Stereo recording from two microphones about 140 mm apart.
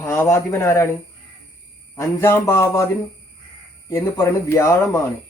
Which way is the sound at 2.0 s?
20° left (ahead or behind).